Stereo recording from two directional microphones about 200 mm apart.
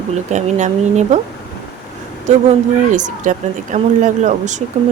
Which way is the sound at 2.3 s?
35° right (ahead or behind).